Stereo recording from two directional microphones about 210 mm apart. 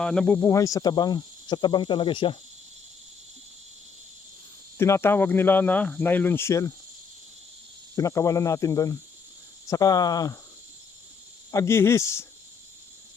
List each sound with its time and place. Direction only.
0.0 s cricket: 5° left (ahead or behind); by 2.3 s 25° left (ahead or behind)
4.8 s speech: 10° left (ahead or behind)
7.9 s speech: 15° left (ahead or behind)
11.5 s speech: 15° left (ahead or behind)